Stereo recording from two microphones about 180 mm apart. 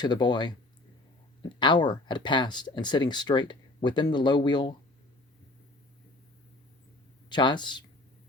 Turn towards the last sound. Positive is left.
turn(degrees=25)  # may be behind; listen again after turning